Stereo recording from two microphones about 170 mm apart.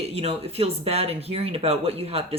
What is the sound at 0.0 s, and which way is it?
Speech, 35° right (ahead or behind).